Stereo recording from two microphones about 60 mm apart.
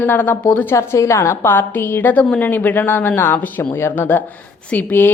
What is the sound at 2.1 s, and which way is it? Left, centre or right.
Speech, centre.